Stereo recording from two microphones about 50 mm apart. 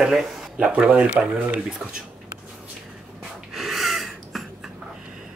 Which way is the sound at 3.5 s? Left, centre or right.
Centre.